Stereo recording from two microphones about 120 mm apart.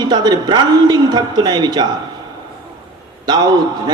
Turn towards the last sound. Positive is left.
turn(degrees=-35)  # may be behind; listen again after turning